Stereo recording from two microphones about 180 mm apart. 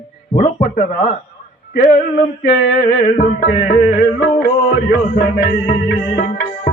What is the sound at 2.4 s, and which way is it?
Music, 50° left (ahead or behind).